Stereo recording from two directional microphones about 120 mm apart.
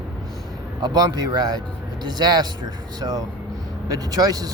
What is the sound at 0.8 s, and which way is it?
Speech, 35° right (ahead or behind).